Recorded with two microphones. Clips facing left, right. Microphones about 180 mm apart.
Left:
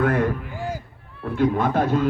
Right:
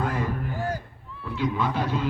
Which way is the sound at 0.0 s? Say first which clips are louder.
Left 7 dB; 60° left (ahead or behind).